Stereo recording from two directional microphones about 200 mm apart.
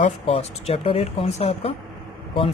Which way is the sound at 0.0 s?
30° left (ahead or behind).